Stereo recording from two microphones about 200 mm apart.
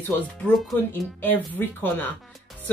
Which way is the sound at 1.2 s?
10° left (ahead or behind).